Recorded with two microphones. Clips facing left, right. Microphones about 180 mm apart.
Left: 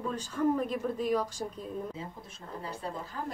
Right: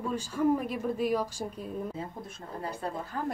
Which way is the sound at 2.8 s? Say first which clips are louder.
Right 3 dB; 50° right (ahead or behind).